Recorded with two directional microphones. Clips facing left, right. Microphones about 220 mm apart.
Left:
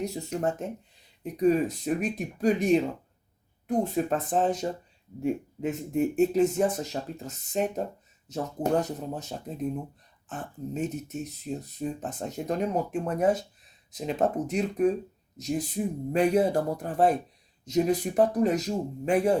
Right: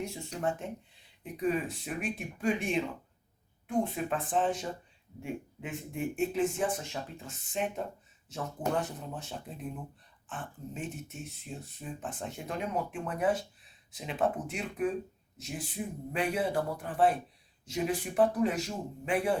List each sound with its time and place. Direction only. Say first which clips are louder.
0.0 s speech: left 5 dB; 40° left (ahead or behind)